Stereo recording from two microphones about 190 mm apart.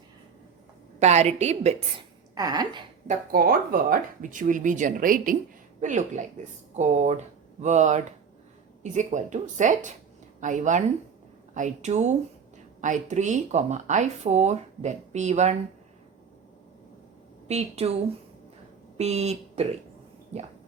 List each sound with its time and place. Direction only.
0.9 s speech: 35° right (ahead or behind)
2.3 s speech: 20° right (ahead or behind)
3.1 s speech: 50° right (ahead or behind)
17.5 s speech: 35° right (ahead or behind)
18.9 s speech: 35° right (ahead or behind)